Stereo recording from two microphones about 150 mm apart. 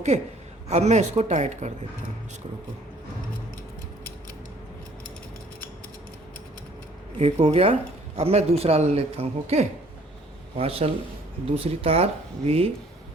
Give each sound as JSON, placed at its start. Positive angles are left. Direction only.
{"t": 0.1, "sound": "speech", "side_deg": -45}
{"t": 7.2, "sound": "speech", "side_deg": -45}